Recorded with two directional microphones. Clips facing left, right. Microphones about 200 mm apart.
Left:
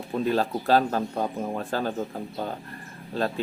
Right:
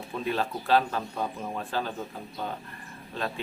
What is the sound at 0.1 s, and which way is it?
Speech, 40° left (ahead or behind).